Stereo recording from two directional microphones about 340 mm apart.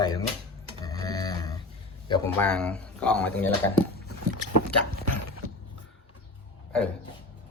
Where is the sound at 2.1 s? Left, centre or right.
Centre.